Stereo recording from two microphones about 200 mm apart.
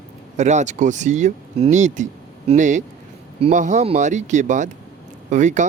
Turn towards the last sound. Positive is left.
turn(degrees=-35)  # may be behind; listen again after turning